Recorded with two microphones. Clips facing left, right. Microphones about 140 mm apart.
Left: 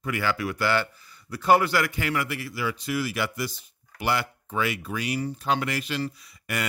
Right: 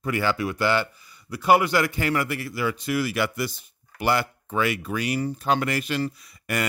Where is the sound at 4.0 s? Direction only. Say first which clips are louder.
Right 3 dB; 45° right (ahead or behind).